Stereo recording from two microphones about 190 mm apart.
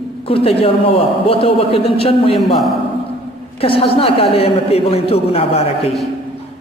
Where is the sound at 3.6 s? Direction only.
30° left (ahead or behind).